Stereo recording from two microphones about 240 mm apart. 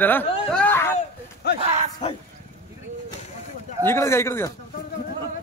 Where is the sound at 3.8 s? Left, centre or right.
Centre.